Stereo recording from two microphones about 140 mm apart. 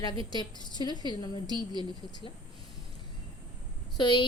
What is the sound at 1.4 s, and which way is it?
Speech, 30° right (ahead or behind).